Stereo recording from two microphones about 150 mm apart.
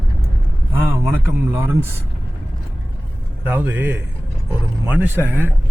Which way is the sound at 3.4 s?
10° right (ahead or behind).